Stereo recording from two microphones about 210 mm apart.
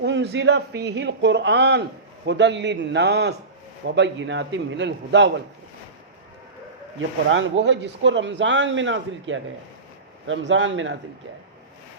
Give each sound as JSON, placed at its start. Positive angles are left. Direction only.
{"t": 0.0, "sound": "speech", "side_deg": -55}
{"t": 7.3, "sound": "speech", "side_deg": -65}